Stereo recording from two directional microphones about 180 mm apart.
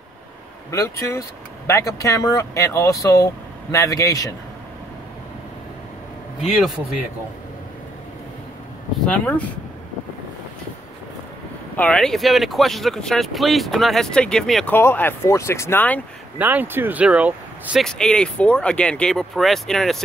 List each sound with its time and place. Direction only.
0.7 s speech: 15° left (ahead or behind)
6.5 s speech: centre (ahead or behind)
9.0 s speech: 10° left (ahead or behind)
11.7 s speech: 5° left (ahead or behind)
16.3 s speech: 10° right (ahead or behind)